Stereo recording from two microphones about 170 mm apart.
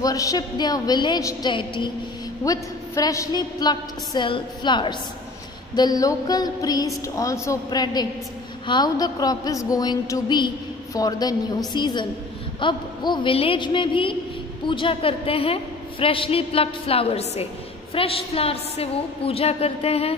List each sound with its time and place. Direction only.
0.0 s a woman's voice: 20° left (ahead or behind); by 20.2 s 35° left (ahead or behind)